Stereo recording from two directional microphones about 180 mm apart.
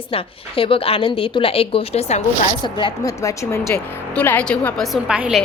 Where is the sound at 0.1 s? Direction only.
30° left (ahead or behind).